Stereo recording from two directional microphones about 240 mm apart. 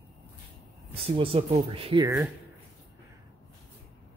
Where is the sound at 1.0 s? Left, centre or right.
Right.